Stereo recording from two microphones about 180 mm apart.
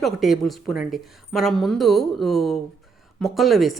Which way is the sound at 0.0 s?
Centre (ahead or behind).